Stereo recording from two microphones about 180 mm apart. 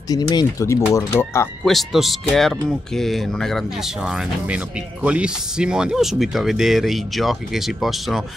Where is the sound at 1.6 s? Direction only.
Centre (ahead or behind).